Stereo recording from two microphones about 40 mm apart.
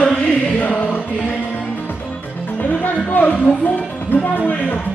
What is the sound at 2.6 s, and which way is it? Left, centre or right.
Music, left.